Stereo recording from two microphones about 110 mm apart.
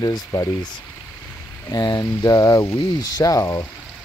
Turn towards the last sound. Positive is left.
turn(degrees=30)  # may be behind; listen again after turning